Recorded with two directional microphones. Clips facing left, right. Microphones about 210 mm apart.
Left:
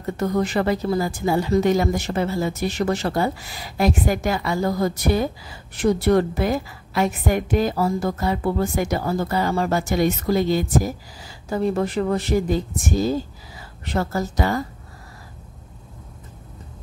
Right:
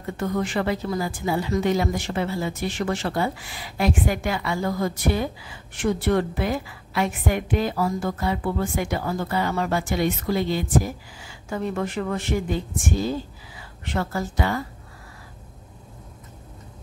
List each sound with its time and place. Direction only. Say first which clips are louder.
0.0 s speech: left 4 dB; 40° left (ahead or behind)